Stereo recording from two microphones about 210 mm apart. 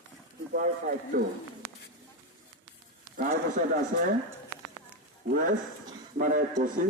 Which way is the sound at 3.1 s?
40° right (ahead or behind).